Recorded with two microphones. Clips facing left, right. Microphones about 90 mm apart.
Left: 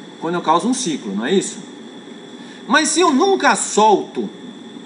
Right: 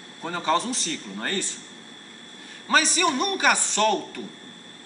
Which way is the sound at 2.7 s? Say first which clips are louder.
Left 8 dB; 10° left (ahead or behind).